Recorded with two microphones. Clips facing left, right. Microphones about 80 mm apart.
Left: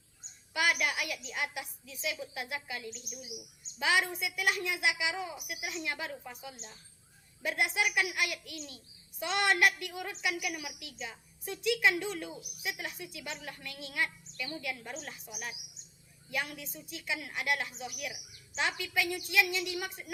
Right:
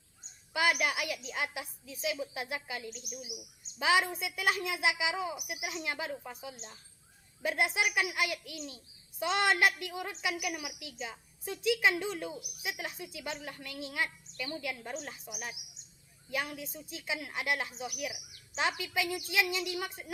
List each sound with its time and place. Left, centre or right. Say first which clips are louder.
0.5 s a sound: right 1 dB; right
1.3 s a child's voice: right 1 dB; right
2.9 s a woman's voice: right 2 dB; right
3.8 s speech: right 2 dB; right
5.3 s a child's voice: right 1 dB; centre
16.3 s a child's voice: right 1 dB; right